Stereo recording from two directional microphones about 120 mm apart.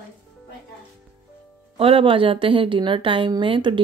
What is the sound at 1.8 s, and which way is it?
A woman's voice, 50° right (ahead or behind).